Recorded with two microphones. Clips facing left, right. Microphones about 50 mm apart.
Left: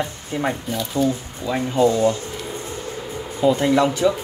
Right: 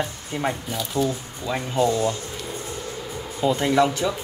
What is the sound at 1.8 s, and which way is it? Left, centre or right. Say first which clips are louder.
Speech: left 4 dB; left.